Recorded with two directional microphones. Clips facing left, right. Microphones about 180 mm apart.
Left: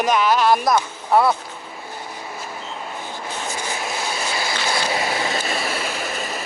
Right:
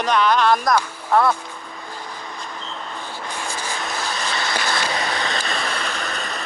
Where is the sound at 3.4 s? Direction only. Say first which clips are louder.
Left 1 dB; 20° left (ahead or behind).